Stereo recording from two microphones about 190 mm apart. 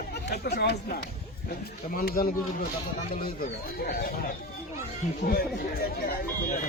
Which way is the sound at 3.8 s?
55° left (ahead or behind).